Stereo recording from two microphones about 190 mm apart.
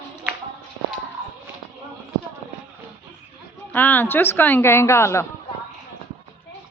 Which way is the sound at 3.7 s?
10° left (ahead or behind).